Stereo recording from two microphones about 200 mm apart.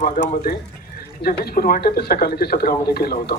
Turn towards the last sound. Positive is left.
turn(degrees=50)  # may be behind; listen again after turning